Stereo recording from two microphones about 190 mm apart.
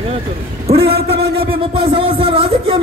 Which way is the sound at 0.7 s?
55° right (ahead or behind).